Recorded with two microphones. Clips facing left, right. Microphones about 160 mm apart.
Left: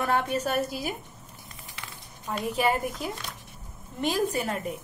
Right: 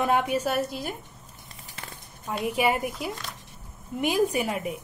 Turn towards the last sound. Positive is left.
turn(degrees=-10)  # may be behind; listen again after turning